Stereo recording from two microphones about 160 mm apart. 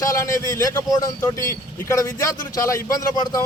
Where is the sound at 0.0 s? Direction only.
20° left (ahead or behind).